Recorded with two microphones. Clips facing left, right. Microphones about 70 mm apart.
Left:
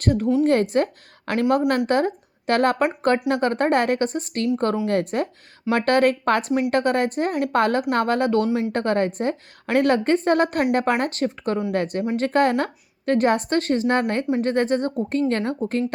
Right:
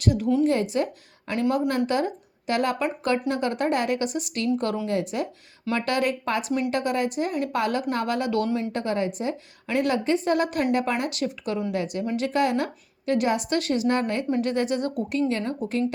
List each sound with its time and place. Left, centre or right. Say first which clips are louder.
0.0 s a woman's voice: left 2 dB; left
4.9 s speech: left 4 dB; left
8.7 s a woman's voice: left 5 dB; left
15.2 s speech: left 3 dB; left